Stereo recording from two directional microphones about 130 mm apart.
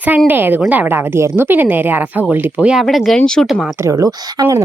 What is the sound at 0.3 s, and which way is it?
Speech, 15° right (ahead or behind).